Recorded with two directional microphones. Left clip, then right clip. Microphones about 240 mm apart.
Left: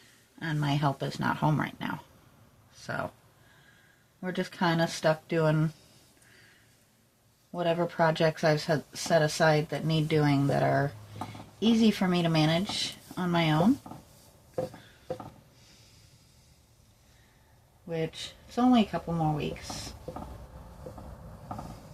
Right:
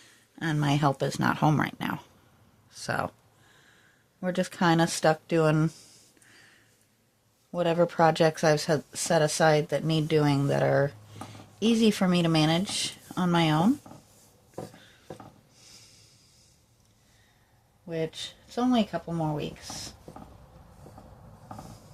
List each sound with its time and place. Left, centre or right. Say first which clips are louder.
0.3 s speech: right 4 dB; right
4.2 s speech: right 3 dB; right
7.5 s speech: right 4 dB; right
17.8 s speech: right 1 dB; right